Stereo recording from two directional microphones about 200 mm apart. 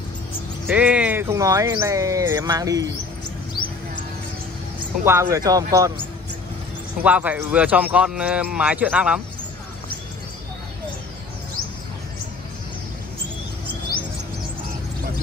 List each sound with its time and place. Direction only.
0.7 s speech: 5° right (ahead or behind)
5.0 s speech: 15° right (ahead or behind)
7.0 s speech: 5° right (ahead or behind)